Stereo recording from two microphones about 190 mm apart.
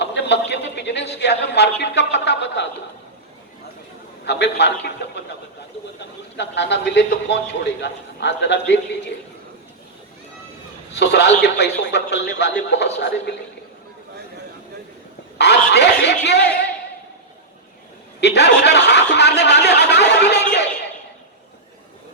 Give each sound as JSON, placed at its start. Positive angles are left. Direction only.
{"t": 0.0, "sound": "a sound", "side_deg": 65}
{"t": 1.8, "sound": "a man's voice", "side_deg": 65}
{"t": 4.3, "sound": "a man's voice", "side_deg": 65}
{"t": 6.3, "sound": "a man's voice", "side_deg": 65}
{"t": 10.9, "sound": "a man's voice", "side_deg": 65}
{"t": 15.4, "sound": "snicker", "side_deg": 65}
{"t": 18.2, "sound": "snicker", "side_deg": 65}
{"t": 19.1, "sound": "a sound", "side_deg": 65}